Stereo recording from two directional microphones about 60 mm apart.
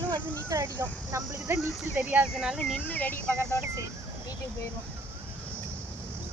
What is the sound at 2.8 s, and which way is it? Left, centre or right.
Speech, left.